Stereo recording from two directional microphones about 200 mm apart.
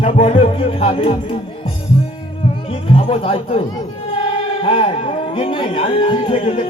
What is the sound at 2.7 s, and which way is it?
Speech, 25° left (ahead or behind).